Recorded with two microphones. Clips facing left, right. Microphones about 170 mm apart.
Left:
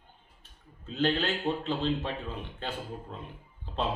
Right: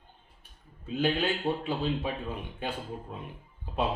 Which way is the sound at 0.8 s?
10° right (ahead or behind).